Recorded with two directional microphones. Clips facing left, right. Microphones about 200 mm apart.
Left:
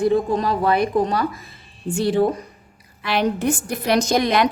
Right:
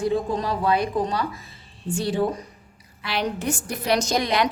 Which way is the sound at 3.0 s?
55° left (ahead or behind).